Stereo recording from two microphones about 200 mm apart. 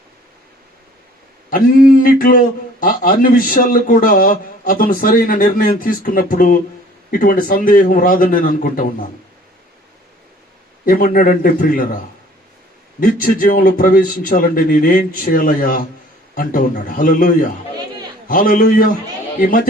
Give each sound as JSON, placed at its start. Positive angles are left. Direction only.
{"t": 1.5, "sound": "a man's voice", "side_deg": 45}
{"t": 10.8, "sound": "a man's voice", "side_deg": 45}
{"t": 13.0, "sound": "a man's voice", "side_deg": 45}